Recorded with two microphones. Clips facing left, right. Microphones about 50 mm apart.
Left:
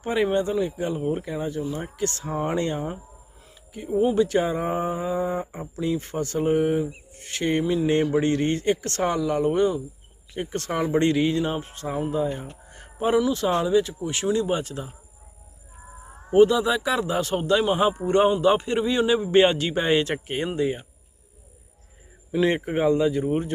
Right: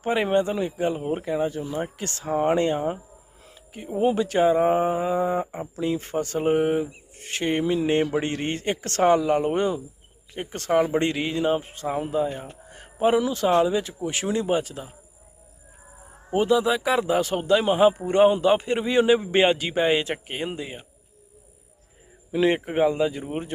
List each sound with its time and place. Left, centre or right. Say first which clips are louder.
0.1 s speech: even; right
5.7 s speech: right 1 dB; right
7.1 s music: even; right
8.0 s speech: left 4 dB; right
8.9 s music: right 5 dB; right
10.4 s speech: right 4 dB; centre
12.4 s a sound: even; centre
13.1 s music: left 1 dB; right
13.5 s a man's voice: right 3 dB; centre
13.7 s speech: left 4 dB; right
14.4 s a man's voice: right 2 dB; centre
16.5 s a man's voice: right 2 dB; centre
22.3 s a man's voice: even; right